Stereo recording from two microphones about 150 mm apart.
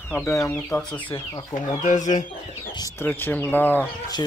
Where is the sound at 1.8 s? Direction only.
55° left (ahead or behind).